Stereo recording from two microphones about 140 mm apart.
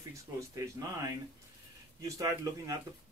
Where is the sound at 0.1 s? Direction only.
25° right (ahead or behind).